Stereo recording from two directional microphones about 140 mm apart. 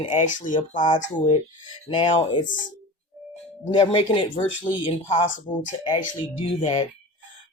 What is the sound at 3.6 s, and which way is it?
Speech, 35° left (ahead or behind).